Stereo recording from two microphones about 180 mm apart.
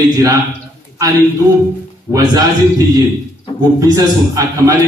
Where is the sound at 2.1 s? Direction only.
20° right (ahead or behind).